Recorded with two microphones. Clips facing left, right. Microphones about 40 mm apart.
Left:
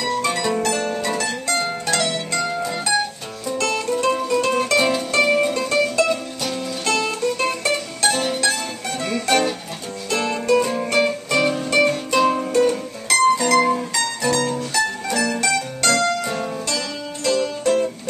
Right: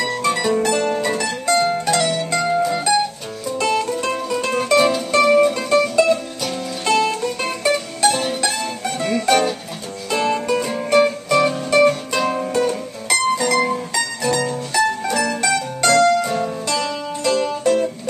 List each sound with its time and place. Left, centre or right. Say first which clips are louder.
0.2 s music: right 3 dB; centre
0.7 s music: right 4 dB; centre
1.5 s mandolin: right 7 dB; centre
2.6 s music: right 4 dB; centre
5.5 s music: right 2 dB; centre
13.9 s music: even; centre